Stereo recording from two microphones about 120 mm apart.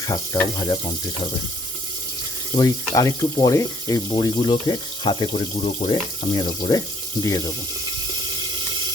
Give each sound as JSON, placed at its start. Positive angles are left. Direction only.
{"t": 0.6, "sound": "speech", "side_deg": 40}
{"t": 2.6, "sound": "speech", "side_deg": 30}
{"t": 4.1, "sound": "speech", "side_deg": 45}
{"t": 5.3, "sound": "speech", "side_deg": 60}
{"t": 5.9, "sound": "speech", "side_deg": 40}